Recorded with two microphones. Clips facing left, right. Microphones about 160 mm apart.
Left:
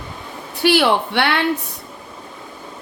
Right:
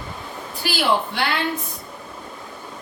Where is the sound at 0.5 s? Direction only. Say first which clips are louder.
Left 6 dB; 70° left (ahead or behind).